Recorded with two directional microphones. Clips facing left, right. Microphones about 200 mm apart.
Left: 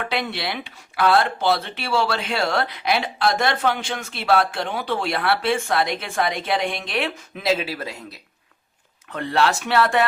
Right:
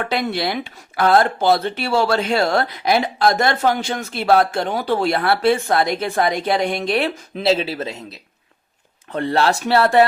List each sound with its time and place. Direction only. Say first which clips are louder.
0.1 s speech: right 5 dB; 40° right (ahead or behind); by 8.2 s 25° right (ahead or behind)
9.1 s speech: right 3 dB; 35° right (ahead or behind)